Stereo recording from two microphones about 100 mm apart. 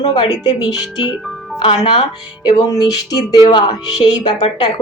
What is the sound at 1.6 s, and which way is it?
Music, 55° left (ahead or behind).